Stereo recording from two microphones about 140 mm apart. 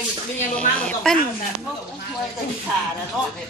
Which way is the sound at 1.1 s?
5° left (ahead or behind).